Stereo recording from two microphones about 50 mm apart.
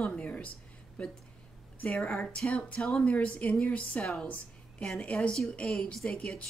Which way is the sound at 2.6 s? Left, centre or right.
Left.